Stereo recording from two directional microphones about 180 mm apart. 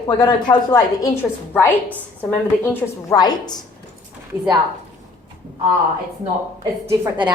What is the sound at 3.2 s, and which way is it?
Speech, 20° left (ahead or behind).